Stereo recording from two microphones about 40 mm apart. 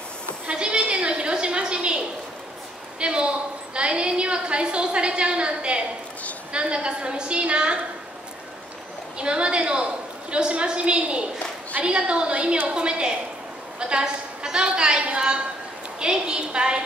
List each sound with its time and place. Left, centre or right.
0.5 s a sound: right
6.5 s a woman's voice: right
9.2 s a woman's voice: right